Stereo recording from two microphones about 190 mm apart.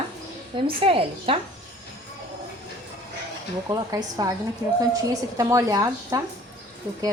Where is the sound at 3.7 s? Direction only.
20° right (ahead or behind).